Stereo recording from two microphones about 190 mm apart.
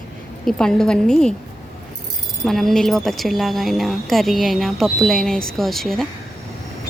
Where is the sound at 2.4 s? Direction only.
Centre (ahead or behind).